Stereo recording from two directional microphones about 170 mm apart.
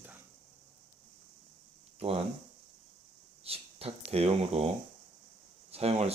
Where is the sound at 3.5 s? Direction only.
35° right (ahead or behind).